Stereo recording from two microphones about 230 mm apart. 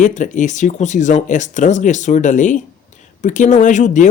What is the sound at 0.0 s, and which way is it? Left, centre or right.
Speech, left.